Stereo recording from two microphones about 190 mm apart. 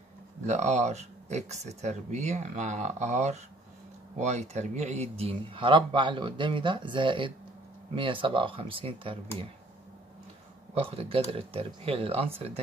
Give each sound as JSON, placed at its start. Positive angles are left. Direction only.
{"t": 0.5, "sound": "speech", "side_deg": -35}
{"t": 10.7, "sound": "speech", "side_deg": -30}